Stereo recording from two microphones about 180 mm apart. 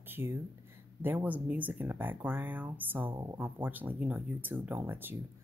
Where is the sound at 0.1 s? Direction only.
10° right (ahead or behind).